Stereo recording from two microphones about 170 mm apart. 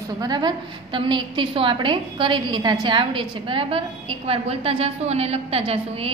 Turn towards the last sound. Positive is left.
turn(degrees=-35)  # may be behind; listen again after turning